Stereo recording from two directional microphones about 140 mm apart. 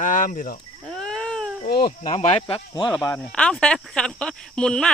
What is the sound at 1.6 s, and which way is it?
Speech, 90° left.